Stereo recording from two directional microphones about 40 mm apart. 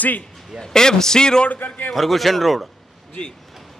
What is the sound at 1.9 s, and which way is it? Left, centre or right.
Speech, centre.